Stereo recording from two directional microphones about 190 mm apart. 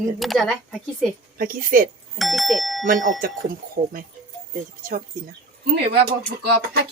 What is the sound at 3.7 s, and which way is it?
Speech, 50° right (ahead or behind).